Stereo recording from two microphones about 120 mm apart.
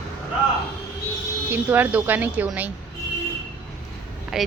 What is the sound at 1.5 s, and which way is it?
Speech, 15° right (ahead or behind).